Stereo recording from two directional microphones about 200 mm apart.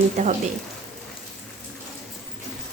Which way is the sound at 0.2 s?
35° right (ahead or behind).